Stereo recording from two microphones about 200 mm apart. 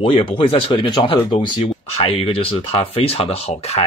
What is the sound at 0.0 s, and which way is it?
Speech, 25° left (ahead or behind).